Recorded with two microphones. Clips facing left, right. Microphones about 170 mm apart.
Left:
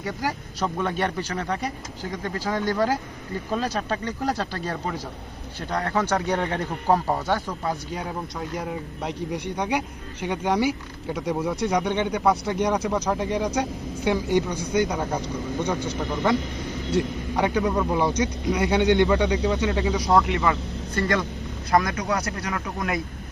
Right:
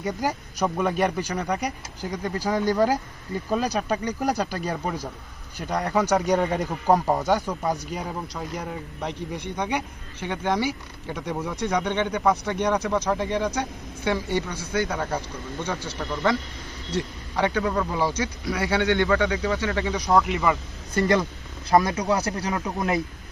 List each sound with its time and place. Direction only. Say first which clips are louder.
0.0 s speech: right 2 dB; 15° right (ahead or behind)
8.4 s speech: left 2 dB; 5° left (ahead or behind)
20.1 s speech: right 1 dB; centre (ahead or behind)
20.9 s speech: right 3 dB; 20° right (ahead or behind)